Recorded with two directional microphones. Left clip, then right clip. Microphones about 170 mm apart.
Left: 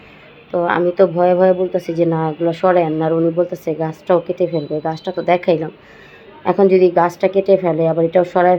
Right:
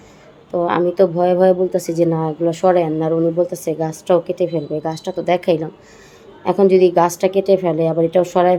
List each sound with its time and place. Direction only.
0.5 s a woman's voice: 10° right (ahead or behind)